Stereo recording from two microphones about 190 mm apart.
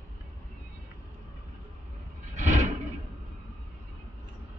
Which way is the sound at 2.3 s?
40° right (ahead or behind).